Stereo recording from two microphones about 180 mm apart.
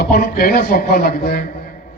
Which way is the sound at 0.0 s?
55° left (ahead or behind).